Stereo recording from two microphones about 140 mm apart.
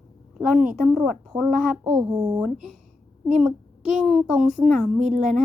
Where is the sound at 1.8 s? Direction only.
25° right (ahead or behind).